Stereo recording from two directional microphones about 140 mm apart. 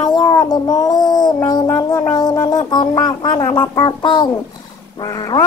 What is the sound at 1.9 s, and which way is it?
Speech, 30° left (ahead or behind).